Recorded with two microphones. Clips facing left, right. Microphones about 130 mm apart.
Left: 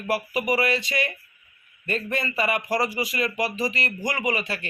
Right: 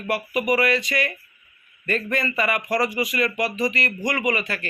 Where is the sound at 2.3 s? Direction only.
25° left (ahead or behind).